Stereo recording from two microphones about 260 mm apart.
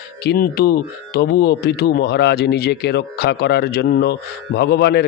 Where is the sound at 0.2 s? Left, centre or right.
Left.